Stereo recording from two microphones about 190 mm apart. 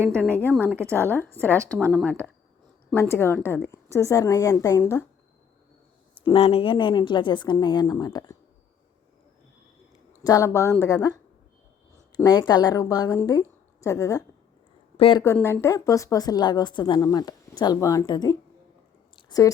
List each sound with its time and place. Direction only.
0.1 s speech: 10° left (ahead or behind)
0.7 s a woman's voice: 15° right (ahead or behind)
1.8 s speech: 5° left (ahead or behind)
6.3 s a woman's voice: 30° left (ahead or behind)
10.1 s speech: 15° left (ahead or behind)
12.2 s a woman's voice: 20° left (ahead or behind)
14.9 s a woman's voice: 30° left (ahead or behind)
15.2 s a woman's voice: 15° left (ahead or behind)
19.1 s a sound: 20° left (ahead or behind)